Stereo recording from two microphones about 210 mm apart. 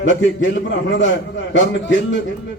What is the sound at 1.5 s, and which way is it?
Speech, 65° left (ahead or behind).